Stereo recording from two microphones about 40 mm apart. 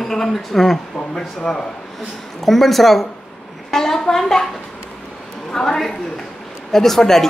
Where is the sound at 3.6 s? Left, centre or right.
Centre.